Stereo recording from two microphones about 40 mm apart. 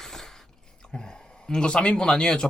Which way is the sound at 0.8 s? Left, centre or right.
Centre.